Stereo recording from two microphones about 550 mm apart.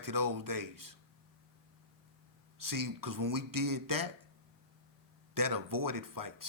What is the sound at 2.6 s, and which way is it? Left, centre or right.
Speech, right.